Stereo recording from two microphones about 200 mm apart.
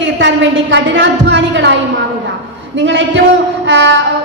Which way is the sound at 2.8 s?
65° right (ahead or behind).